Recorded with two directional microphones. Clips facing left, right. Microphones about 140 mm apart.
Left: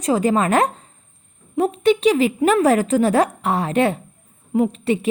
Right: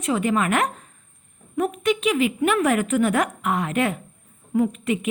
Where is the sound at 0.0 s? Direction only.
35° left (ahead or behind).